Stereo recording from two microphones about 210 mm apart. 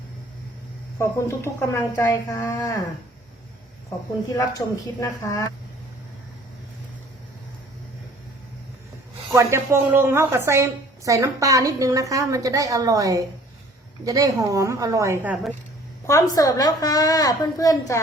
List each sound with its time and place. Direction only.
0.9 s speech: 10° left (ahead or behind)
4.4 s speech: 15° left (ahead or behind)
9.3 s a woman's voice: 15° right (ahead or behind)
16.0 s speech: 15° left (ahead or behind)